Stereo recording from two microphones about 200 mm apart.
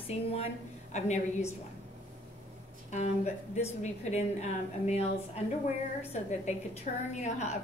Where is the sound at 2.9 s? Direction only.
35° left (ahead or behind).